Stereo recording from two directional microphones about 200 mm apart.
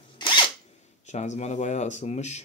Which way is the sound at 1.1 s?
35° left (ahead or behind).